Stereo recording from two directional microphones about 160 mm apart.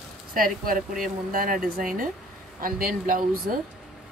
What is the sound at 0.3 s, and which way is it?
Speech, 60° right (ahead or behind).